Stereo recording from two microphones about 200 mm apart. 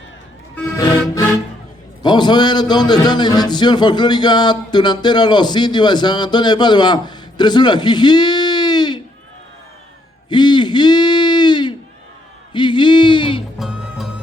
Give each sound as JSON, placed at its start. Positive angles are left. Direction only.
{"t": 0.5, "sound": "music", "side_deg": 15}
{"t": 2.0, "sound": "a man's voice", "side_deg": 20}
{"t": 10.2, "sound": "a sound", "side_deg": 20}
{"t": 13.6, "sound": "music", "side_deg": 0}